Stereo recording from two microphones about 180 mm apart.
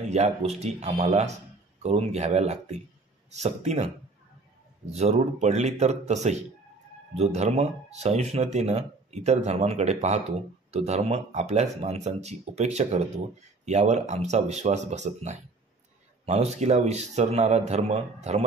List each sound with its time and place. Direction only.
0.1 s speech: 35° right (ahead or behind)
4.9 s speech: 40° right (ahead or behind)